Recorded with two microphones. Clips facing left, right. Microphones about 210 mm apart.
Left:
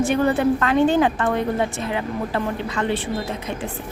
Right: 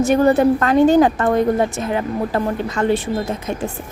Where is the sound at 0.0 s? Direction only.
40° right (ahead or behind).